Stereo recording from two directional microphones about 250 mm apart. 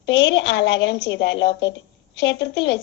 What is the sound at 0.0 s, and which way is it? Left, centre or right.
A child's voice, left.